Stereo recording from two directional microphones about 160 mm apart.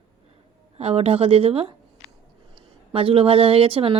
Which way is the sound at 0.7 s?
40° right (ahead or behind).